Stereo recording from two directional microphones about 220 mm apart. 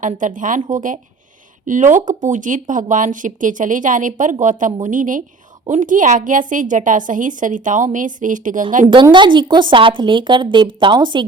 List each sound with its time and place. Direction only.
0.0 s speech: 35° right (ahead or behind)
8.9 s a woman's voice: 20° right (ahead or behind)